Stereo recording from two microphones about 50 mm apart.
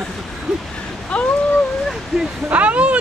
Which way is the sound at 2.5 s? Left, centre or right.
Right.